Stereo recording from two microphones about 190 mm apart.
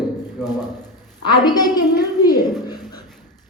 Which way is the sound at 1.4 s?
20° left (ahead or behind).